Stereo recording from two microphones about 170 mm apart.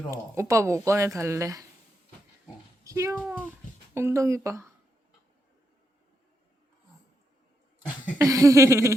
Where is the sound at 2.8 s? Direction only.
15° right (ahead or behind).